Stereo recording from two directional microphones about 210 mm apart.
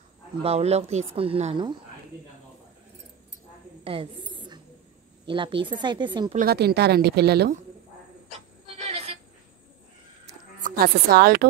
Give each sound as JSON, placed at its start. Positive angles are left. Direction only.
{"t": 0.4, "sound": "speech", "side_deg": -30}
{"t": 3.8, "sound": "a sound", "side_deg": -25}
{"t": 5.2, "sound": "speech", "side_deg": -25}
{"t": 6.3, "sound": "speech", "side_deg": -45}
{"t": 8.7, "sound": "a sound", "side_deg": -30}
{"t": 10.6, "sound": "speech", "side_deg": -45}